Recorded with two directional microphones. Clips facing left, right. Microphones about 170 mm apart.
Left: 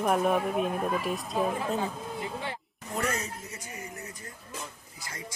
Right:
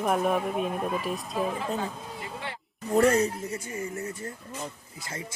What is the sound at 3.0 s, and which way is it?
Speech, 30° right (ahead or behind).